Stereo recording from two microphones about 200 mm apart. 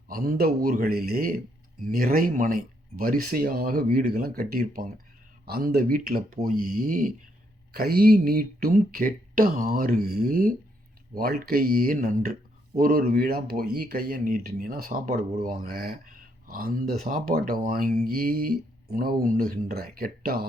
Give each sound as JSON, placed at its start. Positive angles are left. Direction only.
{"t": 0.1, "sound": "speech", "side_deg": -45}